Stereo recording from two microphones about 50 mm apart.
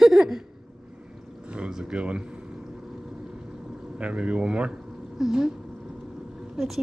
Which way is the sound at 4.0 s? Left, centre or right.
Right.